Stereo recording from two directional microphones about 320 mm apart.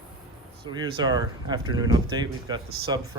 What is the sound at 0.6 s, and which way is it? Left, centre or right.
Speech, centre.